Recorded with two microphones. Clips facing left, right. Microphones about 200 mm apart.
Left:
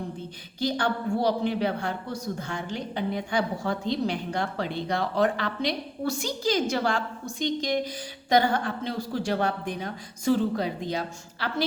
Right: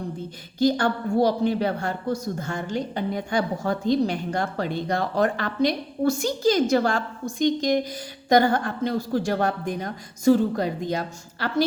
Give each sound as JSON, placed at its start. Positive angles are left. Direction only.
{"t": 0.6, "sound": "a woman's voice", "side_deg": -45}